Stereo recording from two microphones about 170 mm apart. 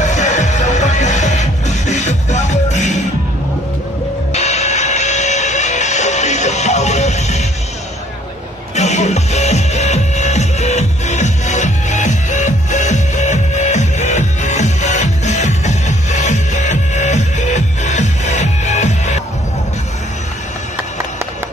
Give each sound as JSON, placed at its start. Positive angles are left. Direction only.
{"t": 0.0, "sound": "music", "side_deg": 45}
{"t": 4.3, "sound": "music", "side_deg": 40}
{"t": 8.7, "sound": "music", "side_deg": 40}